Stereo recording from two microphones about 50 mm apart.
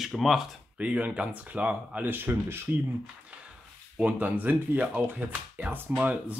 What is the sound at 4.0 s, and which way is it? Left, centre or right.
Speech, right.